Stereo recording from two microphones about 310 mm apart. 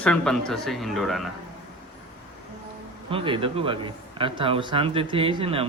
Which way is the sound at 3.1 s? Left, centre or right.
Centre.